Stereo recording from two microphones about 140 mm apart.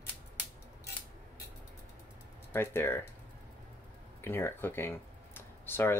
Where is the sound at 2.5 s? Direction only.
15° left (ahead or behind).